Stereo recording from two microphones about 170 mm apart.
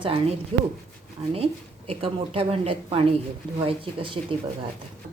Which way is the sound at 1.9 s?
30° right (ahead or behind).